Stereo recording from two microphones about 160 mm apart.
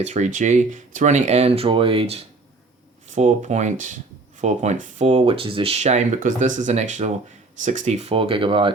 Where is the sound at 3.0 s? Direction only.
50° right (ahead or behind).